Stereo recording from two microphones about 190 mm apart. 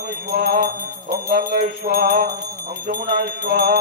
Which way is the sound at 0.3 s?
55° right (ahead or behind).